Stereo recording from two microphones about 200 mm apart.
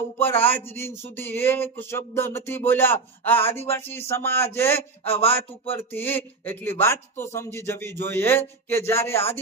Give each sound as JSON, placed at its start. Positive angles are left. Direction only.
{"t": 0.2, "sound": "speech", "side_deg": 10}